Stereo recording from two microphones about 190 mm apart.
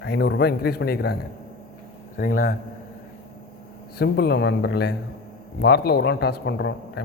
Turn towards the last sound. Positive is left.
turn(degrees=65)  # may be behind; listen again after turning